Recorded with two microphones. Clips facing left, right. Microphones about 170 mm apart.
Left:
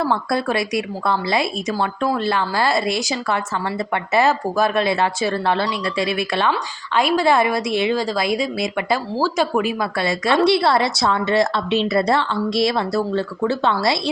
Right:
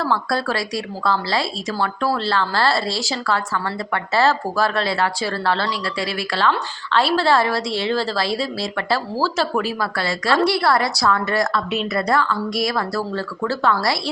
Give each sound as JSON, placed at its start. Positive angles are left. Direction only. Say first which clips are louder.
{"t": 0.0, "sound": "a woman's voice", "louder": "left 1 dB", "side_deg": 20}